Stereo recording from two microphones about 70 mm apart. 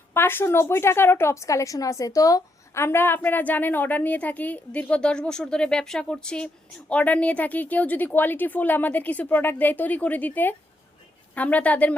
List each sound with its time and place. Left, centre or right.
0.1 s a woman's voice: left
2.7 s a woman's voice: left; by 11.9 s centre